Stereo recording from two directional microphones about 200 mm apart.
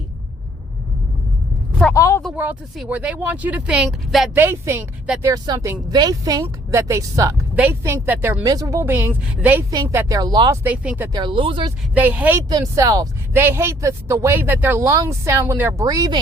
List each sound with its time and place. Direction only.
1.8 s speech: 15° left (ahead or behind)
2.2 s speech: 10° right (ahead or behind)
4.4 s speech: 10° right (ahead or behind)
10.6 s speech: 10° right (ahead or behind)
11.2 s speech: 25° right (ahead or behind)
11.9 s speech: 10° right (ahead or behind)